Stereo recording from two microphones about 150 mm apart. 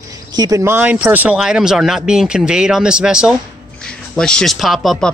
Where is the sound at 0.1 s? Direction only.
25° right (ahead or behind).